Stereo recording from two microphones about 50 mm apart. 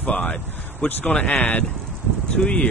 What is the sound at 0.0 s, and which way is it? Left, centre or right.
Speech, left.